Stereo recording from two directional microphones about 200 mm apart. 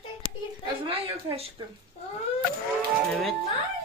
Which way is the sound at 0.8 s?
25° right (ahead or behind).